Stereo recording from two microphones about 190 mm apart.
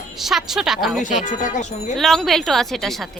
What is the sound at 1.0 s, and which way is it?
Speech, 40° left (ahead or behind).